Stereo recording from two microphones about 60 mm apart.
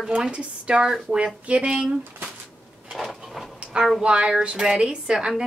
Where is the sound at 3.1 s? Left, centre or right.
Centre.